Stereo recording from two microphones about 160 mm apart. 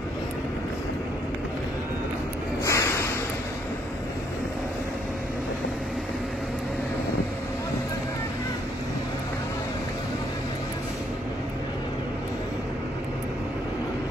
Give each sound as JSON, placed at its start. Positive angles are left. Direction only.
{"t": 2.6, "sound": "snort", "side_deg": 20}